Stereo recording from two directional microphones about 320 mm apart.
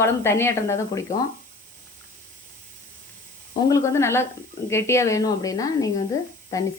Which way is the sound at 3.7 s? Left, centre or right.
Centre.